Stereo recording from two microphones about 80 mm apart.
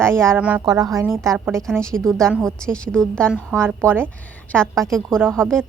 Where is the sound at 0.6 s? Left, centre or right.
Right.